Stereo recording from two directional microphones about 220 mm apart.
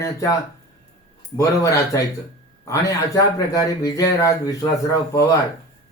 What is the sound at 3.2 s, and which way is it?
Speech, 15° left (ahead or behind).